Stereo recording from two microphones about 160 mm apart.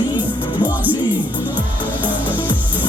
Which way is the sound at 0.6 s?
10° right (ahead or behind).